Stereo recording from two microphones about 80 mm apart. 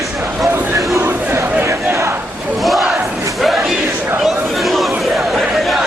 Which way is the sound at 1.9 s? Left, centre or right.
Right.